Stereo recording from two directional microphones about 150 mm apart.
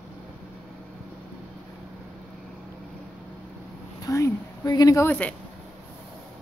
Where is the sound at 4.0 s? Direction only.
20° left (ahead or behind).